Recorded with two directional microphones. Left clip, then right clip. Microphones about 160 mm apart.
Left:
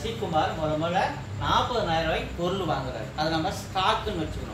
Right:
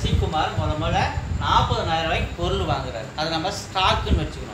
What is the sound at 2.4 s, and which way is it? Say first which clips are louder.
Speech: right 3 dB; 25° right (ahead or behind).